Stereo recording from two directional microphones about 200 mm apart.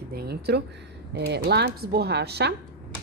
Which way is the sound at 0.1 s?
50° right (ahead or behind).